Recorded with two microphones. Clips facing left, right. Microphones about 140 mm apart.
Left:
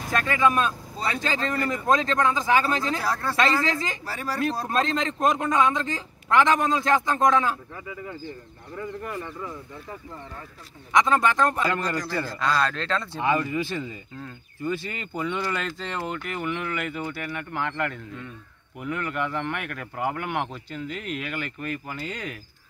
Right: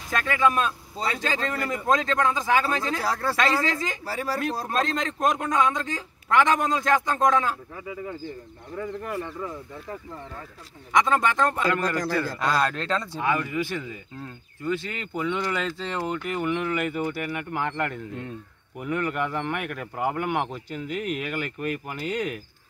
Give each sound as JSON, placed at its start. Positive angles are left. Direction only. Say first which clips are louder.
{"t": 0.1, "sound": "a man's voice", "louder": "left 1 dB", "side_deg": 0}
{"t": 8.7, "sound": "speech", "louder": "right 2 dB", "side_deg": -5}
{"t": 11.1, "sound": "a man's voice", "louder": "left 1 dB", "side_deg": 0}
{"t": 12.5, "sound": "speech", "louder": "right 1 dB", "side_deg": -10}
{"t": 13.2, "sound": "speech", "louder": "left 3 dB", "side_deg": 15}
{"t": 14.6, "sound": "speech", "louder": "right 1 dB", "side_deg": 10}